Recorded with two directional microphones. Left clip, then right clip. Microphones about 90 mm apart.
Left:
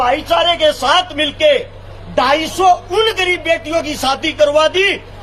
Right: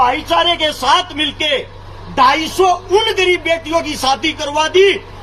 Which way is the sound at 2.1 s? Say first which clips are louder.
Right 2 dB; 60° left (ahead or behind).